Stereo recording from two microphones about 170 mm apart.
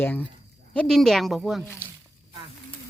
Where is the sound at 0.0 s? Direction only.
10° left (ahead or behind).